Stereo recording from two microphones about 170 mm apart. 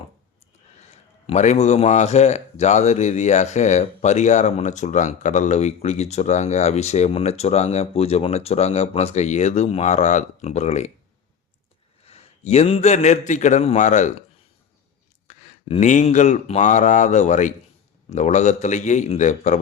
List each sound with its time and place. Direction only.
0.8 s a man's voice: 40° left (ahead or behind)
12.0 s a man's voice: 35° left (ahead or behind)
15.3 s a man's voice: 45° left (ahead or behind)